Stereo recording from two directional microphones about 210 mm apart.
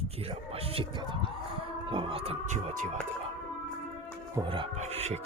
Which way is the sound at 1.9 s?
25° right (ahead or behind).